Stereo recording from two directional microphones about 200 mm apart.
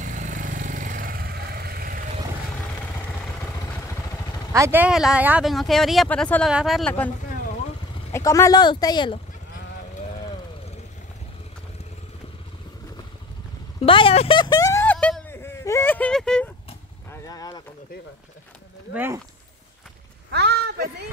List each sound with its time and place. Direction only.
0.0 s vehicle: 40° right (ahead or behind)
3.3 s vehicle: 15° left (ahead or behind)
4.5 s speech: 15° right (ahead or behind); by 7.1 s 5° left (ahead or behind)
8.1 s speech: 15° left (ahead or behind)
13.7 s a sound: 25° left (ahead or behind); by 16.4 s 5° left (ahead or behind)
17.1 s vehicle: 15° left (ahead or behind)
18.9 s speech: 10° right (ahead or behind)
20.2 s a sound: 55° right (ahead or behind)